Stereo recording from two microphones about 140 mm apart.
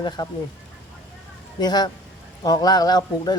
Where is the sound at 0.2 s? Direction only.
30° left (ahead or behind).